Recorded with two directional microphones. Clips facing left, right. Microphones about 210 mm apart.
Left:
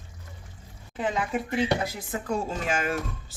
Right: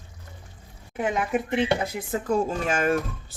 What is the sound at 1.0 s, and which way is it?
Speech, 20° right (ahead or behind).